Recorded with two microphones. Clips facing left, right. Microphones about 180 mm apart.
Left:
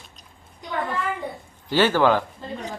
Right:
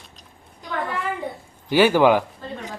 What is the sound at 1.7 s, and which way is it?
Speech, 15° right (ahead or behind).